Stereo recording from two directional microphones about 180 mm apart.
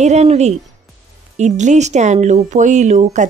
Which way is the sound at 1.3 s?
40° right (ahead or behind).